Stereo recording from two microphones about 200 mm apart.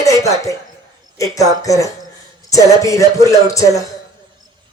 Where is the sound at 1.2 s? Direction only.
15° left (ahead or behind).